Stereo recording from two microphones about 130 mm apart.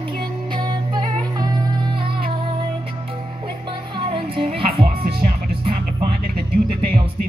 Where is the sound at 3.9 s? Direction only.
45° right (ahead or behind).